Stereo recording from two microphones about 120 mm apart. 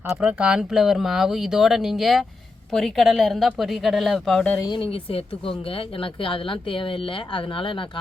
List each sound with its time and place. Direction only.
0.1 s speech: 10° right (ahead or behind)
4.6 s speech: 40° left (ahead or behind)